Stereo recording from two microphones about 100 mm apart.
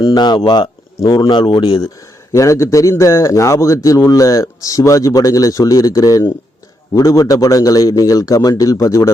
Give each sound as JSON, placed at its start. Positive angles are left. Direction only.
{"t": 0.0, "sound": "speech", "side_deg": 45}
{"t": 2.3, "sound": "a man's voice", "side_deg": 30}